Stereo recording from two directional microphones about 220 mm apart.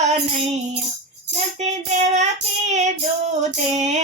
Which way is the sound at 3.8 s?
30° right (ahead or behind).